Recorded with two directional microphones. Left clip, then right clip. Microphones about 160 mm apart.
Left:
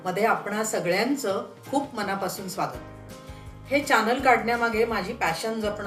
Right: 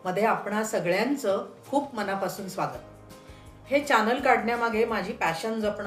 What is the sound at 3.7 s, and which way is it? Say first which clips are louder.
Speech: left 1 dB; 10° left (ahead or behind).